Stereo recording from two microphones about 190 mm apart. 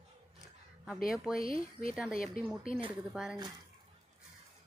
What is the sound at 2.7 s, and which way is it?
Speech, 30° right (ahead or behind).